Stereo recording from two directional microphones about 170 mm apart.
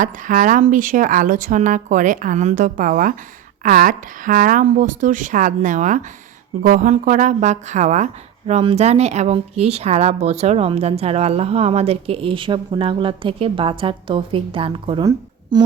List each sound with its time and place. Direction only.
0.0 s a woman's voice: 50° right (ahead or behind); by 15.7 s 25° right (ahead or behind)